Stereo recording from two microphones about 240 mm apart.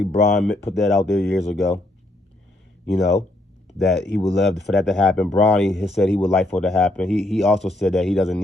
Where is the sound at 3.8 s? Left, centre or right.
Centre.